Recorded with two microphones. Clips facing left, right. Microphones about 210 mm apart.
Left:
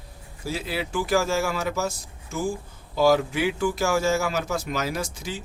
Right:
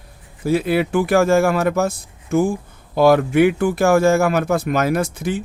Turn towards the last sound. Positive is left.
turn(degrees=-55)  # may be behind; listen again after turning